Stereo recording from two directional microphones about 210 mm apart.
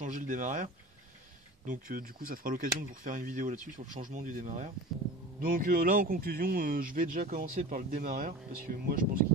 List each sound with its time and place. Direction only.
0.0 s speech: 40° right (ahead or behind)
1.7 s speech: 40° right (ahead or behind)